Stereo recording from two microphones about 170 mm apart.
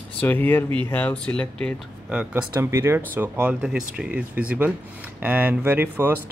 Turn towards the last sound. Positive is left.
turn(degrees=-10)  # may be behind; listen again after turning